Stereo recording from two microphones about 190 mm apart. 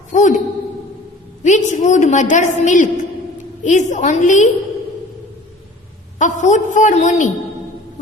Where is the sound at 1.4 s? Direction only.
40° left (ahead or behind).